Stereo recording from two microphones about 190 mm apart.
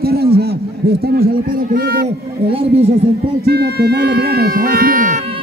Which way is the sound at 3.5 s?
60° right (ahead or behind).